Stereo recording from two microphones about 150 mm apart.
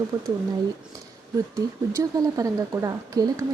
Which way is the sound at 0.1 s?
30° right (ahead or behind).